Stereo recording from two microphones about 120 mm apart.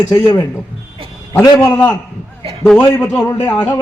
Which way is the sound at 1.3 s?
30° left (ahead or behind).